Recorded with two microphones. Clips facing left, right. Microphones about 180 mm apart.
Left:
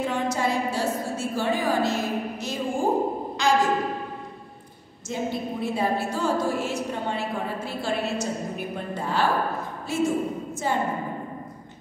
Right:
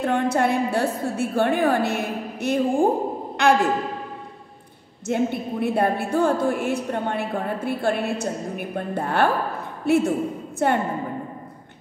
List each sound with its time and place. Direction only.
0.0 s a woman's voice: 60° right (ahead or behind)
5.0 s speech: 60° right (ahead or behind)